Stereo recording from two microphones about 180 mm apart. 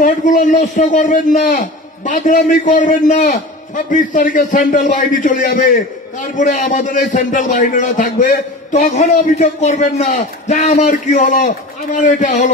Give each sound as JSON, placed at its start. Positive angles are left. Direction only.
{"t": 0.0, "sound": "a man's voice", "side_deg": 45}